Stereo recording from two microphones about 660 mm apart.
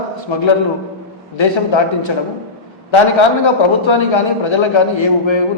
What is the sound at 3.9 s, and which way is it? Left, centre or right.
A man's voice, left.